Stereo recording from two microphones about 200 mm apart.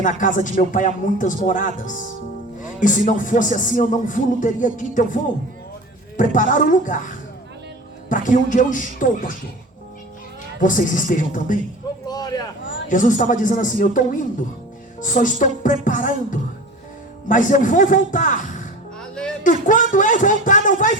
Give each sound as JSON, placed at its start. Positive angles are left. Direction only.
{"t": 0.0, "sound": "music", "side_deg": 40}
{"t": 6.1, "sound": "music", "side_deg": 40}
{"t": 8.1, "sound": "music", "side_deg": 40}
{"t": 10.6, "sound": "music", "side_deg": 40}
{"t": 12.0, "sound": "a sound", "side_deg": 20}
{"t": 12.9, "sound": "music", "side_deg": 40}
{"t": 19.4, "sound": "a sound", "side_deg": 40}